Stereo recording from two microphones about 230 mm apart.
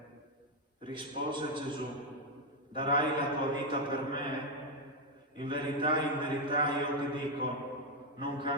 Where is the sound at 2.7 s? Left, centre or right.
Right.